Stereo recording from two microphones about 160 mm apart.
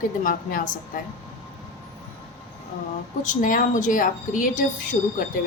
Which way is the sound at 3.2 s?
55° left (ahead or behind).